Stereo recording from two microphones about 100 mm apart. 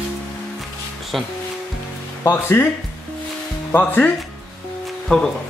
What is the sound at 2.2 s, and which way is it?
Speech, 25° left (ahead or behind).